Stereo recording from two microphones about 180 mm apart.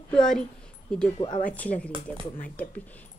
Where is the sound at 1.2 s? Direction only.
25° left (ahead or behind).